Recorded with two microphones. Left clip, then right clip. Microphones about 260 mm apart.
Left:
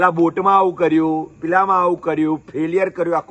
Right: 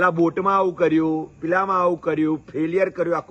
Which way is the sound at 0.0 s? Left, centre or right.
Centre.